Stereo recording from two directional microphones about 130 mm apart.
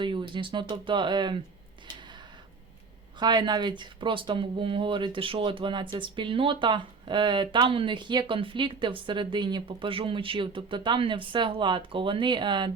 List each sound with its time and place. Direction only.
0.0 s speech: 40° right (ahead or behind)
3.2 s speech: 35° right (ahead or behind)